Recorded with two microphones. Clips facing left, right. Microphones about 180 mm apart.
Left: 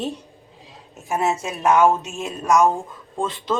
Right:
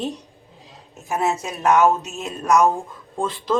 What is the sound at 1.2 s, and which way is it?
Speech, 5° left (ahead or behind).